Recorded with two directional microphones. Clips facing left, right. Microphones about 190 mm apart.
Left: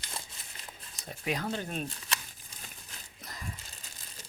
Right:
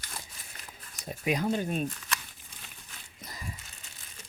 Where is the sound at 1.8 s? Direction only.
30° left (ahead or behind).